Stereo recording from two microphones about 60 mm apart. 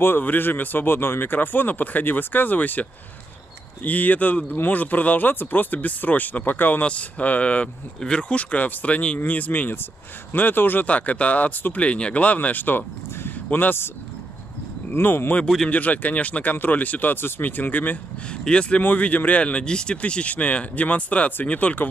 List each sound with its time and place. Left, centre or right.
0.0 s speech: left
6.8 s speech: left
14.9 s speech: left
15.4 s speech: centre
15.7 s speech: left
18.3 s speech: centre